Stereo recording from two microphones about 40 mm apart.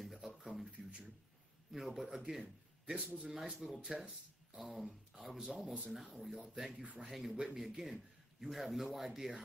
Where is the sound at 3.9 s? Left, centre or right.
Right.